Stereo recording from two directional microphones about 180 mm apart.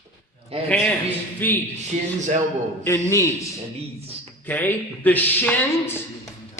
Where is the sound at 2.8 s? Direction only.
15° left (ahead or behind).